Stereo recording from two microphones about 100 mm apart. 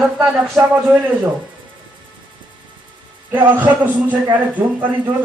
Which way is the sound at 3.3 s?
20° right (ahead or behind).